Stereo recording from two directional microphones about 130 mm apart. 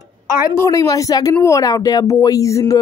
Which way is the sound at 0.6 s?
25° left (ahead or behind).